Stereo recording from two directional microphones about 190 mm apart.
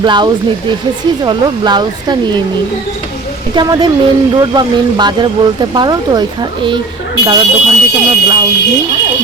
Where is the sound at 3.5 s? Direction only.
25° right (ahead or behind).